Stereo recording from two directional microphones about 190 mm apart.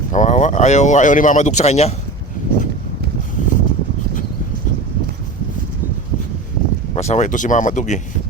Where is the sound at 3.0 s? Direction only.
55° right (ahead or behind).